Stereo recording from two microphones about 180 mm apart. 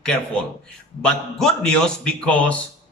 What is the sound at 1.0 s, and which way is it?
Speech, 5° left (ahead or behind).